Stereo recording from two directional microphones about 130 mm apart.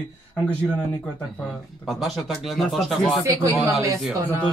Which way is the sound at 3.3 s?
25° right (ahead or behind).